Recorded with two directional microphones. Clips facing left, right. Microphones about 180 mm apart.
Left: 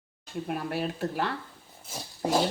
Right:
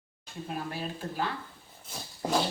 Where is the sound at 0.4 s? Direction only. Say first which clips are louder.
Left 4 dB; 65° left (ahead or behind).